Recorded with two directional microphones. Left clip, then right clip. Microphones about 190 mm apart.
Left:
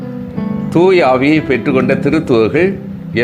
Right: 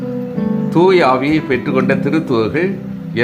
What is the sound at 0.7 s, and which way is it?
Speech, 10° left (ahead or behind).